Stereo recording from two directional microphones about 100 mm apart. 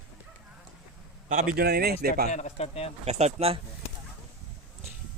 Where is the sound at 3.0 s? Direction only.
90° right.